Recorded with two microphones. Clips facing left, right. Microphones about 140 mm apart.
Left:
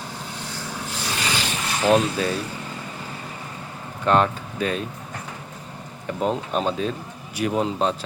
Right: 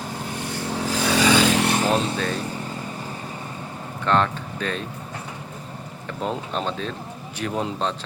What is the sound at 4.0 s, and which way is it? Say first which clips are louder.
Speech: left 2 dB; 10° left (ahead or behind).